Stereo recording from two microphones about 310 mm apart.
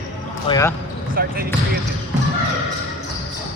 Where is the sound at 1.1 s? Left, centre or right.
Right.